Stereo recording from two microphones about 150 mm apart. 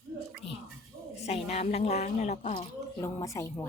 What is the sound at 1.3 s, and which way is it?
A woman's voice, 45° left (ahead or behind).